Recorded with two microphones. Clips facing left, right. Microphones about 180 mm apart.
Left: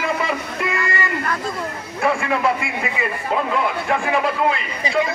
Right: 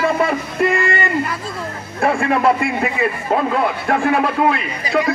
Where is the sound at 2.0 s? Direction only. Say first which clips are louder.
Right 3 dB; 55° right (ahead or behind).